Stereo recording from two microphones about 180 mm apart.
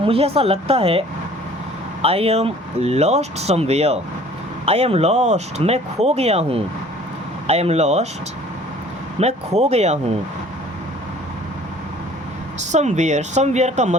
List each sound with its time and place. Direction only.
0.0 s speech: 30° right (ahead or behind)
9.1 s speech: 35° right (ahead or behind)
12.5 s speech: 40° right (ahead or behind)